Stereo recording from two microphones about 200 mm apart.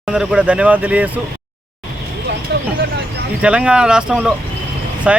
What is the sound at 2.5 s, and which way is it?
Vehicle, 55° right (ahead or behind).